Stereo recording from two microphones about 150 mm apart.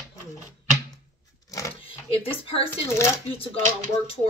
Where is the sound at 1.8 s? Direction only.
40° left (ahead or behind).